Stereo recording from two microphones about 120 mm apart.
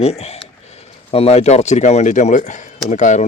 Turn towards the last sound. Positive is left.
turn(degrees=90)